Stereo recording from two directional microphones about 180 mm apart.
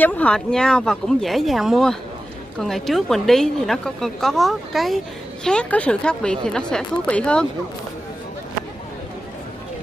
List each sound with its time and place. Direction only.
0.0 s a woman's voice: 10° left (ahead or behind)